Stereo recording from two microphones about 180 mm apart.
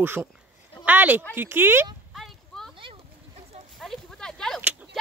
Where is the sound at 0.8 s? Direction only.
10° right (ahead or behind).